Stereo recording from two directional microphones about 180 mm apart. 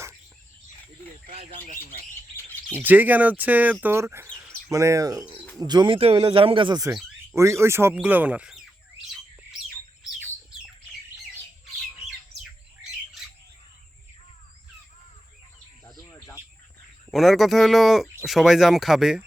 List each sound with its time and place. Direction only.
1.3 s speech: 35° right (ahead or behind)
2.3 s chirp: 10° left (ahead or behind)
2.8 s speech: 10° right (ahead or behind)
7.3 s bird: 15° right (ahead or behind)
12.4 s squawk: centre (ahead or behind)
16.0 s cricket: 15° left (ahead or behind)
17.1 s speech: centre (ahead or behind)